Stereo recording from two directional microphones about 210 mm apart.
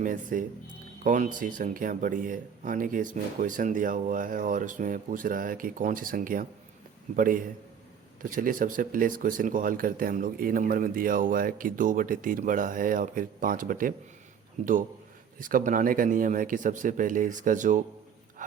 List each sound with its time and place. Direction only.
0.0 s speech: 40° right (ahead or behind)